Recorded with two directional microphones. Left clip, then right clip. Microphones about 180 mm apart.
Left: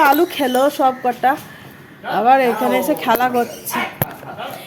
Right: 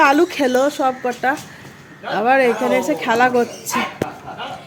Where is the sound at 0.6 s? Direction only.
10° left (ahead or behind).